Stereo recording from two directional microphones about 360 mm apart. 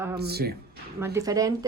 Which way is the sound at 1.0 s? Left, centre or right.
Centre.